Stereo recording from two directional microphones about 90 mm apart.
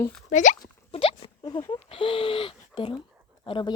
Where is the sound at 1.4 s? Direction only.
60° left (ahead or behind); by 2.9 s 75° left (ahead or behind).